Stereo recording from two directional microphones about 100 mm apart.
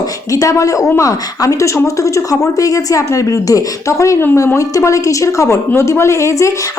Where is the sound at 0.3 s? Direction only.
35° left (ahead or behind).